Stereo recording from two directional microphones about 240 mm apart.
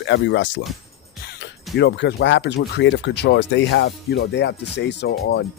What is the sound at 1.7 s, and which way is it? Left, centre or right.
Speech, left.